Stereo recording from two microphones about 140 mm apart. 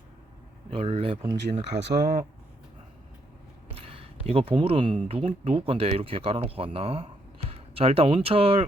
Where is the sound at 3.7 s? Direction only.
45° right (ahead or behind).